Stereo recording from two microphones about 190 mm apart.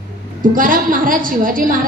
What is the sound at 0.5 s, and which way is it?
A woman's voice, 45° right (ahead or behind).